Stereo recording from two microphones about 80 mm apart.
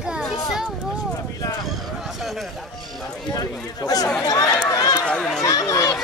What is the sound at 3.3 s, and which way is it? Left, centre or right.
Speech, left.